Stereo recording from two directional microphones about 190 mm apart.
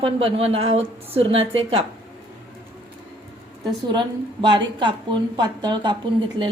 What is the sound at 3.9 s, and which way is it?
A woman's voice, 25° right (ahead or behind).